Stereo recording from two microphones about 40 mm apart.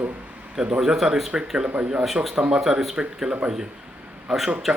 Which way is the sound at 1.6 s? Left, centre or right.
Right.